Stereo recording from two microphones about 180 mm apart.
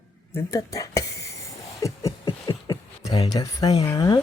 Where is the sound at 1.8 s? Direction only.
20° left (ahead or behind).